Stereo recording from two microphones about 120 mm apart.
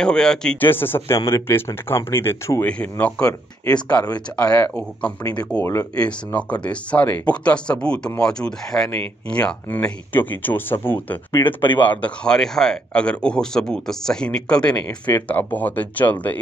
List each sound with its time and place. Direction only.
0.0 s speech: 5° left (ahead or behind)
0.6 s speech: 15° left (ahead or behind)
2.6 s speech: 10° left (ahead or behind)
4.4 s speech: 10° left (ahead or behind)